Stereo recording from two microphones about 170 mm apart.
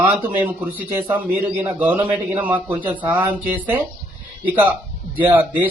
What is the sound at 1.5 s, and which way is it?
A man's voice, 10° right (ahead or behind).